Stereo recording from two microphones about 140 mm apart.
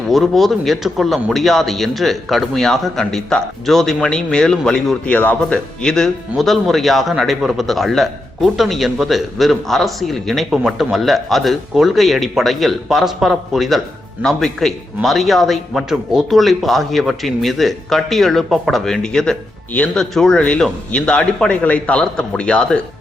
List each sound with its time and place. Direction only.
0.1 s a man's voice: centre (ahead or behind)